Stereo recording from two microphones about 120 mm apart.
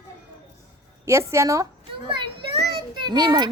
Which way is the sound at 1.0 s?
25° right (ahead or behind).